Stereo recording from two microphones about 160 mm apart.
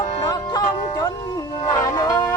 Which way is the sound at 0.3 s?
20° left (ahead or behind).